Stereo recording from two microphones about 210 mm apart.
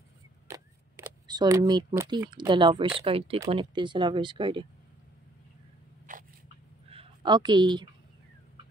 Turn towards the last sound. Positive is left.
turn(degrees=-20)  # may be behind; listen again after turning